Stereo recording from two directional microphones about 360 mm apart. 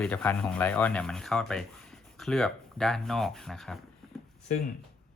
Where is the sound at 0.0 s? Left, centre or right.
Centre.